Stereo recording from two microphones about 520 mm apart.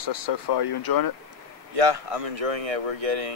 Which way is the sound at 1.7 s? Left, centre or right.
Right.